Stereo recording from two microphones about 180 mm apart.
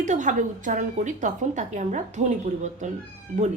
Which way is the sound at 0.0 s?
45° right (ahead or behind).